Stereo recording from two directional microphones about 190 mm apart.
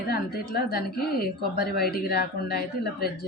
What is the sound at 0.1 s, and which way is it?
Speech, 55° left (ahead or behind).